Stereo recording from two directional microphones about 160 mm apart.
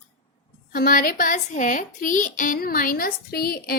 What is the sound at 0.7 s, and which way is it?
A woman's voice, 60° left (ahead or behind).